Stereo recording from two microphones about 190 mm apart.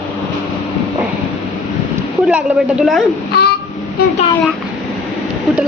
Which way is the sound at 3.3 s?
55° left (ahead or behind).